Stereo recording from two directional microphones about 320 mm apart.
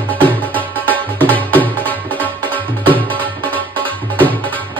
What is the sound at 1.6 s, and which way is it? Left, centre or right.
Music, centre.